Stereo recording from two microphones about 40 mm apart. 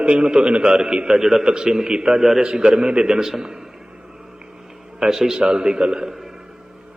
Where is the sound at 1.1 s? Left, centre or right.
Centre.